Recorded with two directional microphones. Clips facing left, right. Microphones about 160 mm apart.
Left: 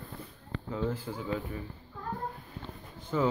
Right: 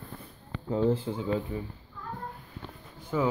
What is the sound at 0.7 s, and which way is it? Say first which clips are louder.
Speech: right 7 dB; 30° right (ahead or behind).